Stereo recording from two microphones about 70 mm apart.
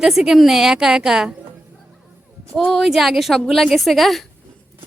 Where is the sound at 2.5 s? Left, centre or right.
Centre.